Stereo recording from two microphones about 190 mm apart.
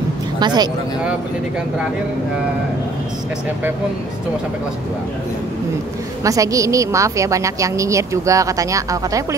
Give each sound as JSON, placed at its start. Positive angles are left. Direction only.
{"t": 0.4, "sound": "speech", "side_deg": -20}
{"t": 6.2, "sound": "a woman's voice", "side_deg": -15}